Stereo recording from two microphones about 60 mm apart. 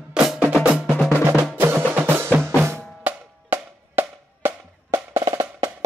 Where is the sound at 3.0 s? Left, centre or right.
Right.